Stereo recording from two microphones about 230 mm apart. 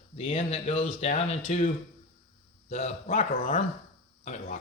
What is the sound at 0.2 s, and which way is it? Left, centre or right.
Speech, left.